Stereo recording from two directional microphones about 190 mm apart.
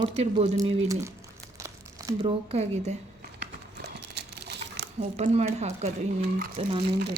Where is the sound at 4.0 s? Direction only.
60° right (ahead or behind).